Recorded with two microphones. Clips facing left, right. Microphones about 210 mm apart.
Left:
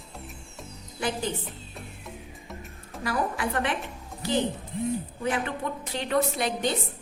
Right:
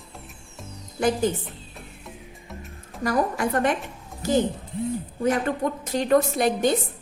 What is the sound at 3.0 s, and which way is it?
A woman's voice, 45° right (ahead or behind).